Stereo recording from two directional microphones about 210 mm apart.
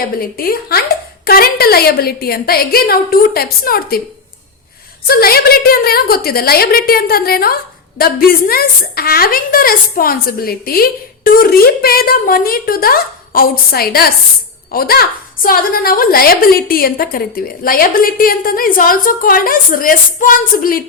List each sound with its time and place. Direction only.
0.2 s a woman's voice: 45° left (ahead or behind)
5.0 s a woman's voice: 45° left (ahead or behind)